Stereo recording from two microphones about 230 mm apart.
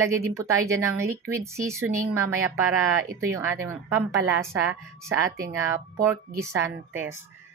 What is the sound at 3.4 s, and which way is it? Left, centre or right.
A woman's voice, centre.